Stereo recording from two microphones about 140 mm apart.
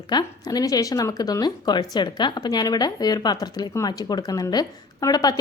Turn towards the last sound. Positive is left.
turn(degrees=30)  # may be behind; listen again after turning